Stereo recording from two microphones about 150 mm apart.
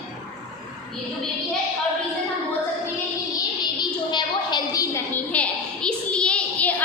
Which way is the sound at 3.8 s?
30° left (ahead or behind).